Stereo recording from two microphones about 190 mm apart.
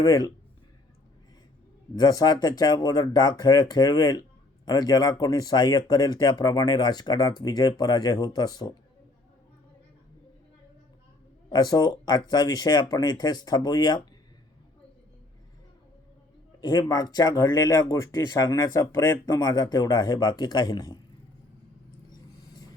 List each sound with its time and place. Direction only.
0.0 s speech: 20° left (ahead or behind)
2.0 s speech: 20° left (ahead or behind)
11.4 s speech: 20° left (ahead or behind)
16.6 s speech: 20° left (ahead or behind)